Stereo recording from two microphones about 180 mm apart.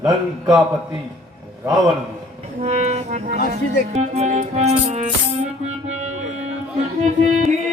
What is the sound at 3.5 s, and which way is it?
Speech, 40° right (ahead or behind).